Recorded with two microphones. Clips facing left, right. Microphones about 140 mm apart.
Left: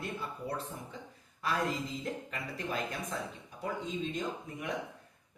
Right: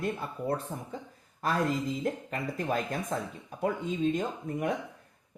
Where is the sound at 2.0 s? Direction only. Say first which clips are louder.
Right 6 dB; 45° right (ahead or behind).